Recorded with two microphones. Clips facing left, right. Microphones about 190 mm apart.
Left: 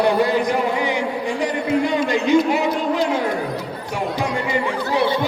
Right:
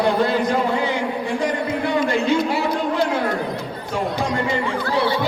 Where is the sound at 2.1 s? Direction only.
15° left (ahead or behind).